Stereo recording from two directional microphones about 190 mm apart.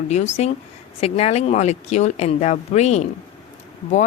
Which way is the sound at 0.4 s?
35° left (ahead or behind).